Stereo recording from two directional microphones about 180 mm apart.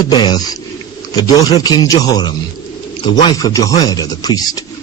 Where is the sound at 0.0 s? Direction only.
25° left (ahead or behind).